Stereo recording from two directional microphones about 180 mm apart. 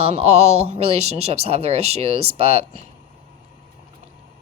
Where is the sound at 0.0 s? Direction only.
35° right (ahead or behind).